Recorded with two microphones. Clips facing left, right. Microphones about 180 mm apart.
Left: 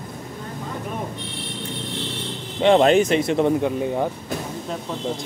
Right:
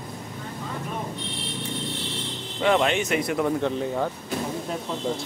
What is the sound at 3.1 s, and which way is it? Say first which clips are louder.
Speech: left 5 dB; 25° left (ahead or behind).